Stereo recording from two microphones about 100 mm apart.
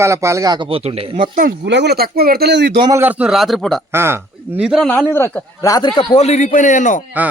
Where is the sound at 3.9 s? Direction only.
25° right (ahead or behind).